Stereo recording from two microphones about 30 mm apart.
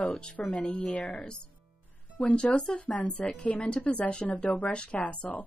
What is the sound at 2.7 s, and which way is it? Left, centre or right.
Speech, left.